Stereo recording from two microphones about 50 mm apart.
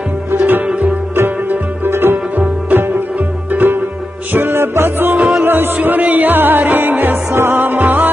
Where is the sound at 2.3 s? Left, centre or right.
Right.